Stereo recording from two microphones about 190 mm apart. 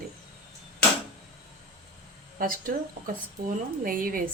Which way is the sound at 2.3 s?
45° right (ahead or behind).